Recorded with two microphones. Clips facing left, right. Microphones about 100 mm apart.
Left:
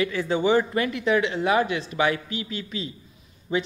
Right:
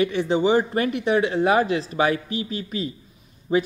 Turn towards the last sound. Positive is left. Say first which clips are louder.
# right 5 dB
turn(degrees=-30)  # may be behind; listen again after turning